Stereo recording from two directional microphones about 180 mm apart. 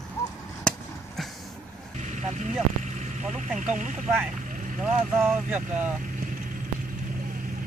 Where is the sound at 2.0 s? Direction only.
40° right (ahead or behind).